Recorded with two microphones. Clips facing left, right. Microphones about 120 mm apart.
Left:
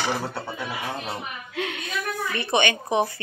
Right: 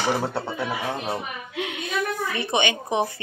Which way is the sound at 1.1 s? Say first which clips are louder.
Right 2 dB; 15° right (ahead or behind).